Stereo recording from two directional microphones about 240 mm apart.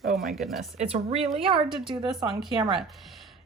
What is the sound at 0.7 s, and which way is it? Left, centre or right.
Speech, right.